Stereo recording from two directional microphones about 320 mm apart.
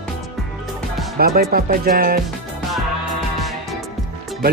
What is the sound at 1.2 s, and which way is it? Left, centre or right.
Speech, right.